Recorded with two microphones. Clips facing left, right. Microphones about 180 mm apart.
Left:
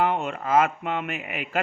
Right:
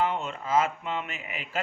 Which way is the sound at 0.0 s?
60° left (ahead or behind).